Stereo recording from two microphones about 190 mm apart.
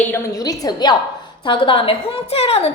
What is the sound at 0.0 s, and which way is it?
A woman's voice, 10° left (ahead or behind).